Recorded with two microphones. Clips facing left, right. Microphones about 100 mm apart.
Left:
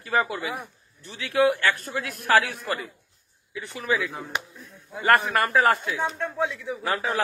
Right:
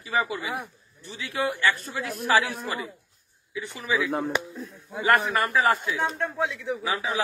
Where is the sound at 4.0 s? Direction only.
60° right (ahead or behind).